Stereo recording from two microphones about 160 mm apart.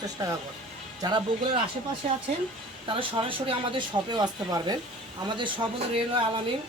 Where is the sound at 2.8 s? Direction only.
35° right (ahead or behind).